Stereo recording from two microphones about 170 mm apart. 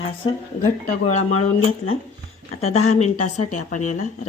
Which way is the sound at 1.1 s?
40° left (ahead or behind).